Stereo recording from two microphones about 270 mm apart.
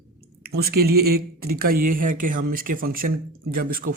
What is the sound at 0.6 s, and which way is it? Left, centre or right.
Speech, right.